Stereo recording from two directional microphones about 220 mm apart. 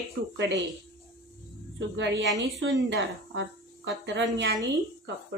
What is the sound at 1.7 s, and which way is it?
Speech, 55° right (ahead or behind).